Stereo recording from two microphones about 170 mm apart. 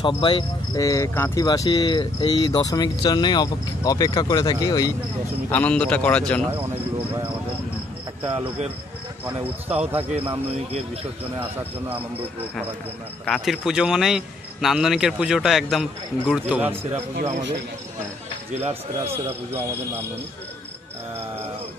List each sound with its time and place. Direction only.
0.0 s speech: 30° left (ahead or behind)
5.5 s a man's voice: 10° left (ahead or behind)
8.3 s a man's voice: 35° right (ahead or behind)
9.2 s speech: 10° right (ahead or behind)
13.2 s speech: centre (ahead or behind)
17.1 s speech: 90° right
18.5 s a man's voice: 35° right (ahead or behind)